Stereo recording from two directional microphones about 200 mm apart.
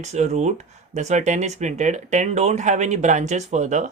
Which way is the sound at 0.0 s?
35° right (ahead or behind).